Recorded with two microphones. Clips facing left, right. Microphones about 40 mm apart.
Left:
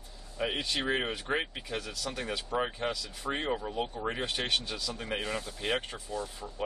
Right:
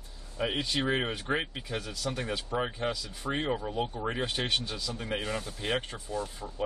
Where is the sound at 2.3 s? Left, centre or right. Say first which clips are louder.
Even; centre.